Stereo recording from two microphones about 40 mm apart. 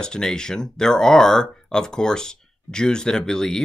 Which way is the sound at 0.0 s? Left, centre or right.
Centre.